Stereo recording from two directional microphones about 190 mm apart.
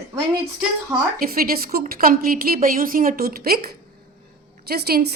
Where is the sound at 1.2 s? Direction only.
50° right (ahead or behind).